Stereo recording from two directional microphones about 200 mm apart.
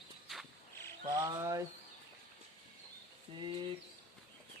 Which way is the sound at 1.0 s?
20° right (ahead or behind).